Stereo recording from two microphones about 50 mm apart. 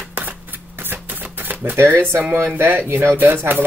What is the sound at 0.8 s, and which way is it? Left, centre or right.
Typewriter, right.